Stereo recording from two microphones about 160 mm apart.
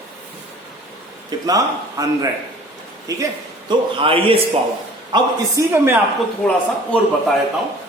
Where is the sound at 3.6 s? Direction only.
35° right (ahead or behind).